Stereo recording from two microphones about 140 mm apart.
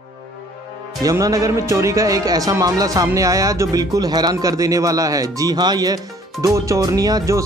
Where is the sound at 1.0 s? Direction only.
25° right (ahead or behind).